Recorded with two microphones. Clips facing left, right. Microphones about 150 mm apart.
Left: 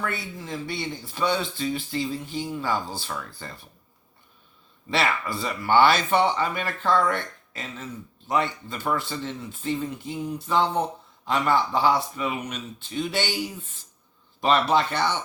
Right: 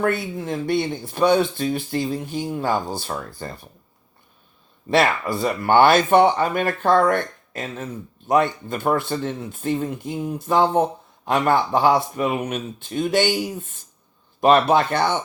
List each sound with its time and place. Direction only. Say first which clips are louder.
0.0 s speech: right 9 dB; 55° right (ahead or behind)
4.9 s speech: right 6 dB; 50° right (ahead or behind)